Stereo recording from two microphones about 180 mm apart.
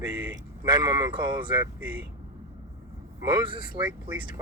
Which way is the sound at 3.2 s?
25° right (ahead or behind).